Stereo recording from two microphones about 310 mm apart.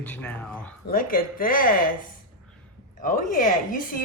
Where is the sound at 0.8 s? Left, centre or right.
Left.